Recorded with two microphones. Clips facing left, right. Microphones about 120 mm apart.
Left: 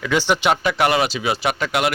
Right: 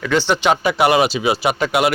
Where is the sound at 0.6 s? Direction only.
10° right (ahead or behind).